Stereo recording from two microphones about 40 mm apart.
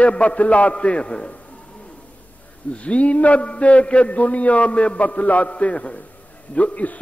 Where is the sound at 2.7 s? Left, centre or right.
Left.